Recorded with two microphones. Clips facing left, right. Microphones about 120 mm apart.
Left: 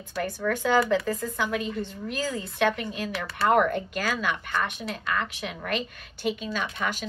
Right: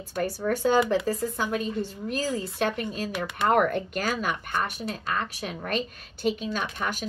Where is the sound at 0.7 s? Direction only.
30° right (ahead or behind).